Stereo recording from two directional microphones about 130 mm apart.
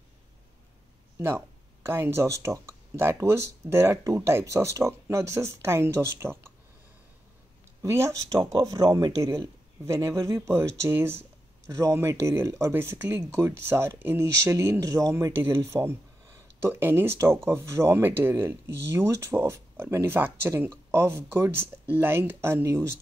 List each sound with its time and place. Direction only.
1.1 s speech: 20° right (ahead or behind)
7.8 s speech: 20° right (ahead or behind)